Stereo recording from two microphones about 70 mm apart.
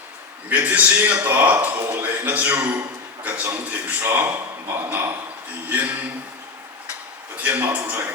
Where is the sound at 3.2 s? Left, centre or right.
Right.